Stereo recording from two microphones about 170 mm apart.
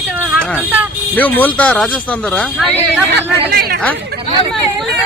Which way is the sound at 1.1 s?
10° left (ahead or behind).